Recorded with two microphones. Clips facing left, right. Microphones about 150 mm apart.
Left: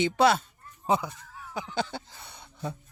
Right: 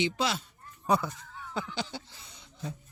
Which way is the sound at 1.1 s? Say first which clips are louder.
Right 1 dB; 5° left (ahead or behind).